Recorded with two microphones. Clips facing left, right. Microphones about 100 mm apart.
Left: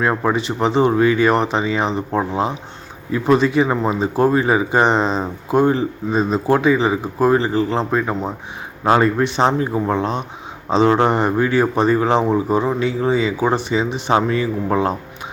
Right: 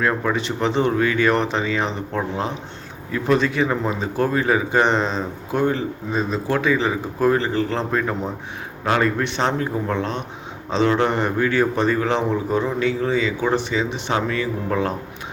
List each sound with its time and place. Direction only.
0.0 s a man's voice: 25° left (ahead or behind)
3.1 s a man's voice: 10° left (ahead or behind)
9.2 s a man's voice: 15° left (ahead or behind)
10.8 s speech: 35° left (ahead or behind)
11.1 s a man's voice: 20° left (ahead or behind)